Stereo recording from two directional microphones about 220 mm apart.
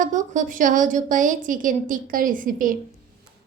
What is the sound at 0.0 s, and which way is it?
A woman's voice, 35° right (ahead or behind).